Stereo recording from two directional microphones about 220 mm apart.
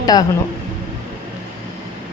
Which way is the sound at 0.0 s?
15° left (ahead or behind).